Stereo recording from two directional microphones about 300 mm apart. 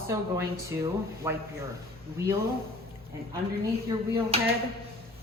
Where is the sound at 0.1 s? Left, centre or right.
Centre.